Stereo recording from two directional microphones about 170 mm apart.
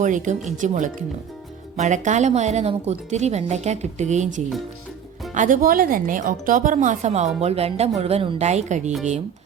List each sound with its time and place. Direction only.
0.0 s speech: 45° right (ahead or behind)